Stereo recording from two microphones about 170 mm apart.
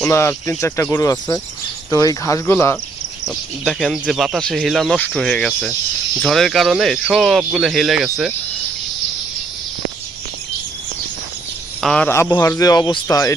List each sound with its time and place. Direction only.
0.1 s speech: 15° left (ahead or behind)
3.2 s speech: centre (ahead or behind)
11.8 s speech: 5° left (ahead or behind); by 13.3 s 20° left (ahead or behind)